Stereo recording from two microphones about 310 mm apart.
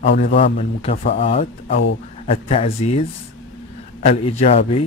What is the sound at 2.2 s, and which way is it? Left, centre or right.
Speech, centre.